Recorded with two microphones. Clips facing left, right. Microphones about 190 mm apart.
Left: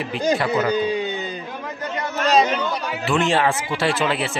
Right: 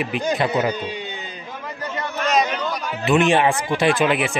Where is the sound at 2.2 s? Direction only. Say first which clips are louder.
Left 3 dB; 25° left (ahead or behind).